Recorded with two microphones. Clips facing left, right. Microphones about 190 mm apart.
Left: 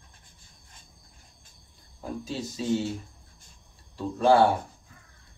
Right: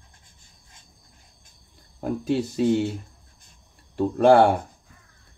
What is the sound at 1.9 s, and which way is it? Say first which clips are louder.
Speech: right 9 dB; 60° right (ahead or behind).